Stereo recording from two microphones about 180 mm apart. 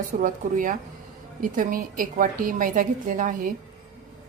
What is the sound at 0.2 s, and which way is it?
A woman's voice, 45° right (ahead or behind).